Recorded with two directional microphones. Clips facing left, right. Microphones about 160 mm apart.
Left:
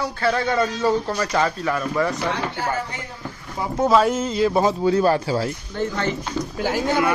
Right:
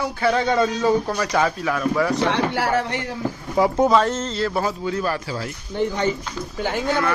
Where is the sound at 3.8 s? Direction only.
5° left (ahead or behind); by 5.5 s 30° left (ahead or behind).